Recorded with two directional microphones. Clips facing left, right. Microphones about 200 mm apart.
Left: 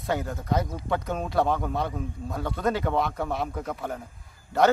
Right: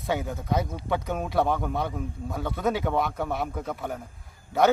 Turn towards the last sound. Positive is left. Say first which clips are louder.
# even
turn(degrees=0)  # may be behind; listen again after turning